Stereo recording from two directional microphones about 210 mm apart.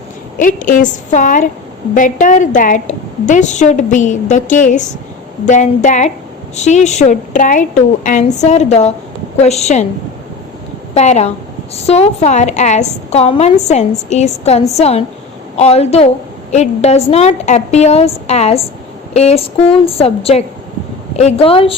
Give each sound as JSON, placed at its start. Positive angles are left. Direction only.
{"t": 0.3, "sound": "a woman's voice", "side_deg": 40}
{"t": 10.9, "sound": "a woman's voice", "side_deg": 30}